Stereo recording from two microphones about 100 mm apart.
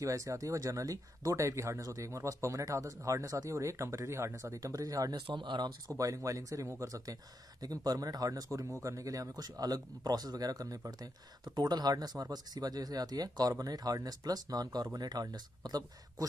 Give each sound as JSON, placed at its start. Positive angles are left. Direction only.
{"t": 0.0, "sound": "speech", "side_deg": -35}
{"t": 5.2, "sound": "speech", "side_deg": -50}
{"t": 5.9, "sound": "speech", "side_deg": -35}